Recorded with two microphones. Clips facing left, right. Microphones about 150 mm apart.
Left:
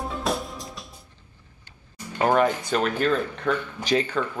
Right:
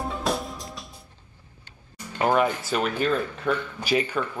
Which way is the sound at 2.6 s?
10° right (ahead or behind).